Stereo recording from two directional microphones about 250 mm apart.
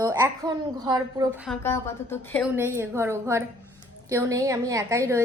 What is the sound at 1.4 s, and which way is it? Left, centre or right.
A woman's voice, centre.